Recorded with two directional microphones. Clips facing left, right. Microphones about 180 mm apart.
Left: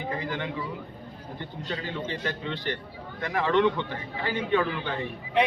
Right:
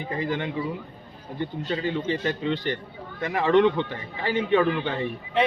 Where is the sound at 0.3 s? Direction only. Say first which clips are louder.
Right 4 dB; 20° right (ahead or behind).